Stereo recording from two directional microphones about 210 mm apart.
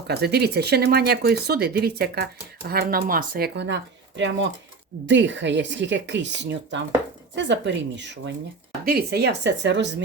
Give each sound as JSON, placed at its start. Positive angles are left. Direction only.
{"t": 0.1, "sound": "speech", "side_deg": -50}
{"t": 5.0, "sound": "speech", "side_deg": -60}
{"t": 8.8, "sound": "speech", "side_deg": -45}